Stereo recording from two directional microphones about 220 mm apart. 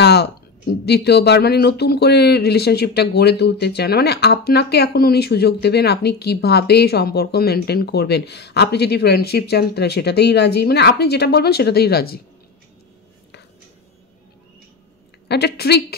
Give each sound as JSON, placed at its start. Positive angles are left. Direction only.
{"t": 0.0, "sound": "speech", "side_deg": 50}
{"t": 15.2, "sound": "speech", "side_deg": 50}